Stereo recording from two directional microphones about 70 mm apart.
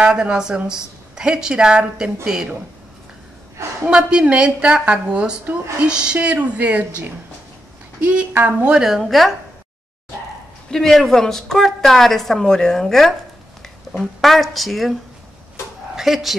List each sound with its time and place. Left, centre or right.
0.0 s a woman's voice: centre
3.9 s a woman's voice: centre
8.6 s a woman's voice: centre
10.7 s a woman's voice: centre
13.9 s a sound: centre
14.2 s a woman's voice: centre
16.0 s speech: centre